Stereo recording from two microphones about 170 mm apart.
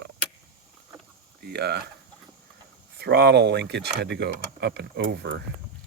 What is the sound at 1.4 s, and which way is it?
Speech, 75° right (ahead or behind).